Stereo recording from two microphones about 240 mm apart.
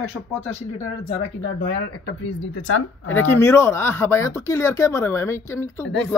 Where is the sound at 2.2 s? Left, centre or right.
Left.